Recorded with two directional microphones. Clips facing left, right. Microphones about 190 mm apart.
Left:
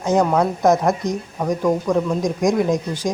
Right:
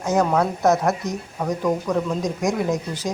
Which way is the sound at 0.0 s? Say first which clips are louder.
Left 2 dB; 15° left (ahead or behind).